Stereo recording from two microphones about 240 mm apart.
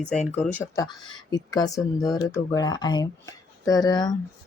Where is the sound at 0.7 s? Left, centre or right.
Centre.